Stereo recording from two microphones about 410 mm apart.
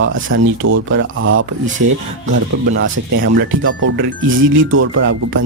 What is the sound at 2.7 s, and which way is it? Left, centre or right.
Speech, right.